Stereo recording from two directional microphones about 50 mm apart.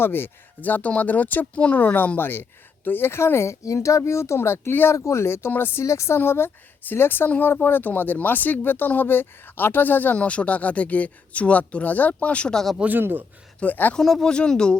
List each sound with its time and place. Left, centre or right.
0.0 s speech: left
2.1 s speech: left
4.4 s speech: left
5.0 s speech: left
5.5 s a woman's voice: left
5.8 s speech: left
6.1 s a woman's voice: left
10.2 s speech: left
12.7 s speech: right
13.0 s a man's voice: right
13.6 s speech: left
14.0 s speech: centre
14.3 s speech: centre